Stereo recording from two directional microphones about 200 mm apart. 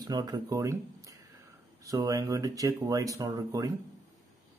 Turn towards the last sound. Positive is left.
turn(degrees=-20)  # may be behind; listen again after turning